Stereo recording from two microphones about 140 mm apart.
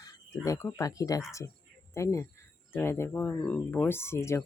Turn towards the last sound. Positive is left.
turn(degrees=15)  # may be behind; listen again after turning